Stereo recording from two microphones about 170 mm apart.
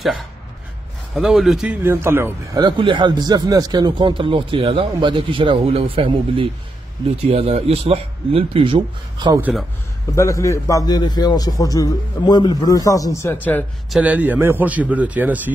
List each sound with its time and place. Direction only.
1.1 s a man's voice: 5° right (ahead or behind)
2.6 s a man's voice: 30° right (ahead or behind)
9.4 s a man's voice: centre (ahead or behind)
10.1 s a man's voice: 15° left (ahead or behind)
13.8 s a man's voice: 5° right (ahead or behind)